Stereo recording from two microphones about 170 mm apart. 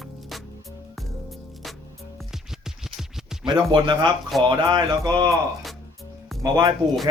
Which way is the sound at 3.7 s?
25° right (ahead or behind).